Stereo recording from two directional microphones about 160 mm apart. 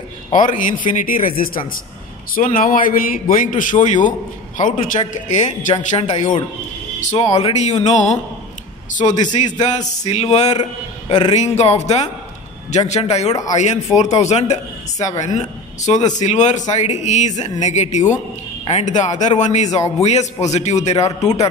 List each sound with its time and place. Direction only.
0.3 s speech: 55° left (ahead or behind)
6.1 s a man's voice: 30° left (ahead or behind)
7.0 s speech: 45° left (ahead or behind)
9.1 s a man's voice: 25° left (ahead or behind)
9.6 s speech: 45° left (ahead or behind)